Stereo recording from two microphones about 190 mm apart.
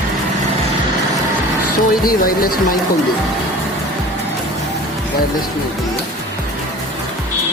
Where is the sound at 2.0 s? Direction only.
50° left (ahead or behind).